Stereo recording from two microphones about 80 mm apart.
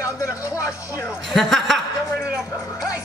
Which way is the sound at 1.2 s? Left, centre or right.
Centre.